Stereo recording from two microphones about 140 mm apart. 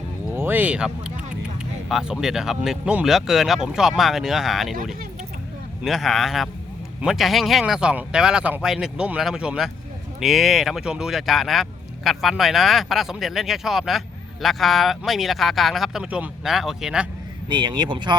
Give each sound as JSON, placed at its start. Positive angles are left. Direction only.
{"t": 0.3, "sound": "a sound", "side_deg": -15}
{"t": 1.9, "sound": "speech", "side_deg": -5}
{"t": 5.8, "sound": "speech", "side_deg": 0}
{"t": 17.5, "sound": "speech", "side_deg": -35}